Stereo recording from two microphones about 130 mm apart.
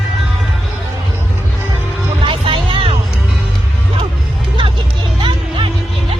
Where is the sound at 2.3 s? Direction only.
40° right (ahead or behind).